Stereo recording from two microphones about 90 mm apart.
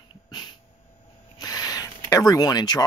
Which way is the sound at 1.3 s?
45° left (ahead or behind).